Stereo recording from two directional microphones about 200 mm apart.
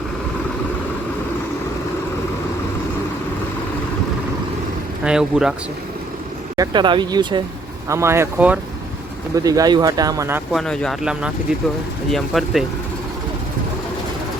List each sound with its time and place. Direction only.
5.0 s speech: 5° right (ahead or behind)
6.6 s speech: 25° right (ahead or behind)
10.5 s speech: centre (ahead or behind)